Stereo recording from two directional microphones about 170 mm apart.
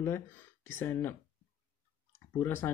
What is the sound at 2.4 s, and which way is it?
Speech, 15° left (ahead or behind).